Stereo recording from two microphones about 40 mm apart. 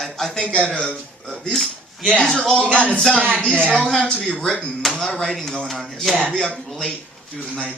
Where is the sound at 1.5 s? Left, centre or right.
Centre.